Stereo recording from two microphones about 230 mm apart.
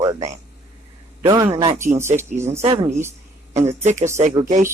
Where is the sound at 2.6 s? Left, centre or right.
Right.